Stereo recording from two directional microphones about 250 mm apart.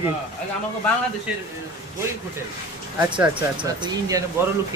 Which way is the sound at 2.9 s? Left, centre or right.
Centre.